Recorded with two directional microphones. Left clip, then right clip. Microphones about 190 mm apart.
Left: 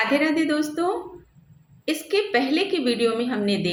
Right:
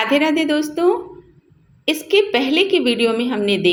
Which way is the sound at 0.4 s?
30° right (ahead or behind).